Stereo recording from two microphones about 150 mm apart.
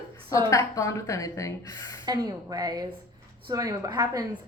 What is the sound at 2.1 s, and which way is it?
Speech, 25° right (ahead or behind).